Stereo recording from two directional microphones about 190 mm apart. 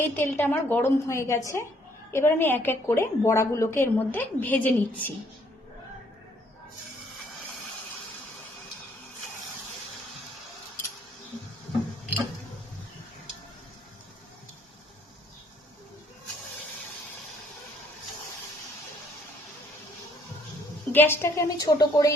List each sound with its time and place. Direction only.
0.0 s a woman's voice: 10° left (ahead or behind)
20.9 s a woman's voice: 10° left (ahead or behind)